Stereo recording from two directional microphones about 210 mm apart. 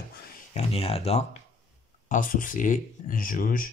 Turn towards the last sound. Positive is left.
turn(degrees=40)  # may be behind; listen again after turning